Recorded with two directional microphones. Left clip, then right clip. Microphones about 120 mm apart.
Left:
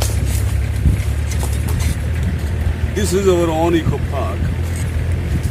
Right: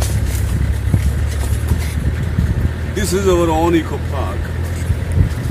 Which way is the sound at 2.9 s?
50° right (ahead or behind).